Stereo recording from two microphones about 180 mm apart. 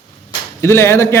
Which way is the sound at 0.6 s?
15° left (ahead or behind).